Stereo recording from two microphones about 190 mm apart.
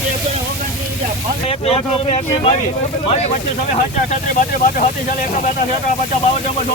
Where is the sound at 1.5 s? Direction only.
30° left (ahead or behind).